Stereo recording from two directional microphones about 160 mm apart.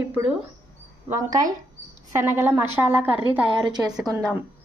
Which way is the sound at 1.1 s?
20° right (ahead or behind).